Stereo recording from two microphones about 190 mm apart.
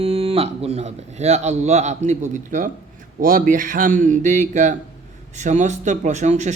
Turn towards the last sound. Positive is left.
turn(degrees=-40)  # may be behind; listen again after turning